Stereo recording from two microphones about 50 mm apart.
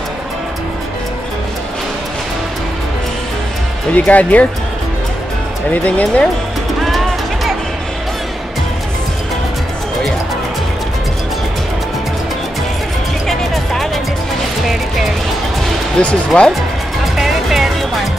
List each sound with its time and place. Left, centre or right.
4.0 s speech: left
5.7 s speech: left
13.3 s music: centre
14.7 s music: centre
16.0 s speech: centre
17.0 s music: centre